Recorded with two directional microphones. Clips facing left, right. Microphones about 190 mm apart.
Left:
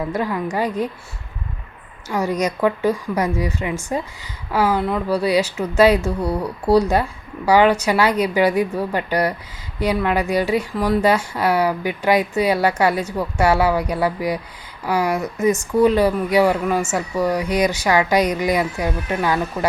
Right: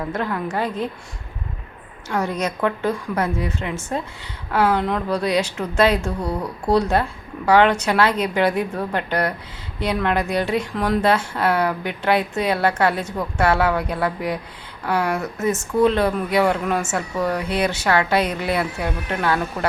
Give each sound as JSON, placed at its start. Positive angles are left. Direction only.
{"t": 0.1, "sound": "speech", "side_deg": 10}
{"t": 2.0, "sound": "speech", "side_deg": 10}